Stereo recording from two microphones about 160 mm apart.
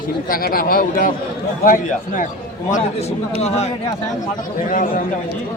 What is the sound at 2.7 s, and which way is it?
Speech, 40° left (ahead or behind).